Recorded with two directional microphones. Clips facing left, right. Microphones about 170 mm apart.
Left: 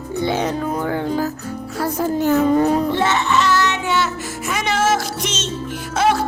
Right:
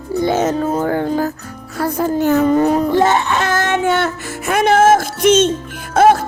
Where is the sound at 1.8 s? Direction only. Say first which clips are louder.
Right 3 dB; 60° right (ahead or behind).